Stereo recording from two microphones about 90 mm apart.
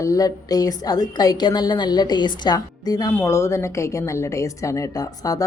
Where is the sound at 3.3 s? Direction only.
30° left (ahead or behind).